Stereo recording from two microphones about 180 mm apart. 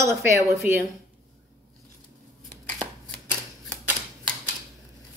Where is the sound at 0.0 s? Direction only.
15° right (ahead or behind).